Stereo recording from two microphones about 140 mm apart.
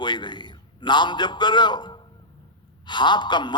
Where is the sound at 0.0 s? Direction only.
35° left (ahead or behind).